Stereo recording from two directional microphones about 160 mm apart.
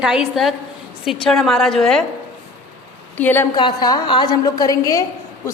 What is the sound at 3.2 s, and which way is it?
Speech, 10° left (ahead or behind).